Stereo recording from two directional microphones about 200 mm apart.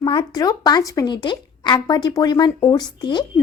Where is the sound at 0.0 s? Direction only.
25° left (ahead or behind).